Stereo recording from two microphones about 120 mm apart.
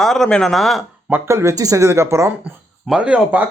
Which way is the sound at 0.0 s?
5° left (ahead or behind).